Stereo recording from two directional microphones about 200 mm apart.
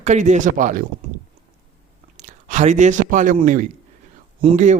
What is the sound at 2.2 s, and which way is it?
Speech, 40° right (ahead or behind).